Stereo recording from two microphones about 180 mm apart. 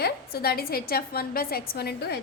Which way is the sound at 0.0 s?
60° left (ahead or behind).